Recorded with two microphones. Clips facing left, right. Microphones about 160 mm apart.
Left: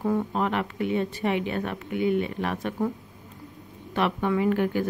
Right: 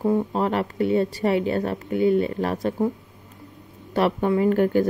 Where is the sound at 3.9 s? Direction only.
35° right (ahead or behind).